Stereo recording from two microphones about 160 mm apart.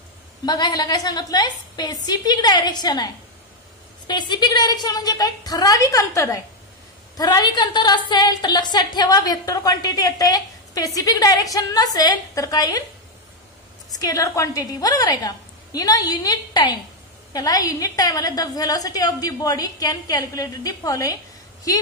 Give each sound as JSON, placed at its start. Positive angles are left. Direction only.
{"t": 0.5, "sound": "a woman's voice", "side_deg": 25}
{"t": 4.1, "sound": "a woman's voice", "side_deg": 25}
{"t": 13.9, "sound": "a woman's voice", "side_deg": 20}